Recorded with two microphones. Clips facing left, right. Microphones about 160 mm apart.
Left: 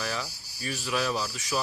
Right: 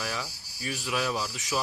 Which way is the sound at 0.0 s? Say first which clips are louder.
Left 1 dB; 10° right (ahead or behind).